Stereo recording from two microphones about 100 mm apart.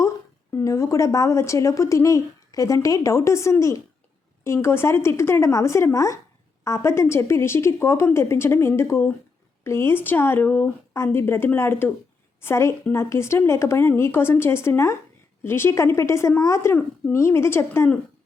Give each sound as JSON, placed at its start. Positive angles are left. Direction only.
{"t": 0.5, "sound": "a woman's voice", "side_deg": 30}